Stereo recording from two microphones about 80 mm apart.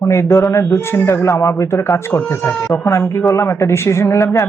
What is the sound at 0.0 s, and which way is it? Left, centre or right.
Speech, left.